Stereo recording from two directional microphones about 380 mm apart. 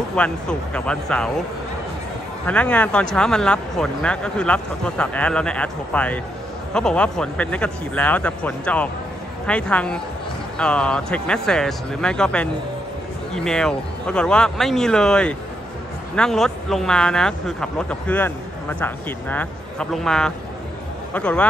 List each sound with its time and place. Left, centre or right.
0.1 s speech: centre
2.4 s speech: centre